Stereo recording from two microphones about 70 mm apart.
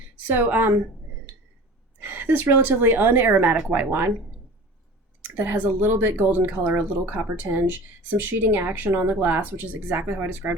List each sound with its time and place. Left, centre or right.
0.3 s speech: right
2.0 s speech: right
5.4 s speech: right